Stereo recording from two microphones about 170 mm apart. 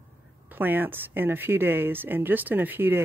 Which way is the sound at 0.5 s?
10° right (ahead or behind).